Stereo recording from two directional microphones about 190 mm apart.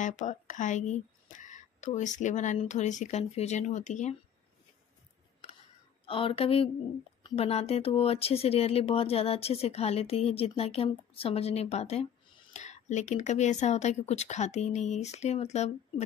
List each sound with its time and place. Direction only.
0.0 s speech: 40° left (ahead or behind)
6.0 s speech: 30° left (ahead or behind)